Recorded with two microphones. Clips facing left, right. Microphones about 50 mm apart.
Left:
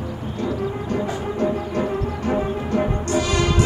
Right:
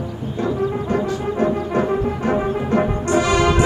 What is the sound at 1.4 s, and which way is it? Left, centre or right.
Music, right.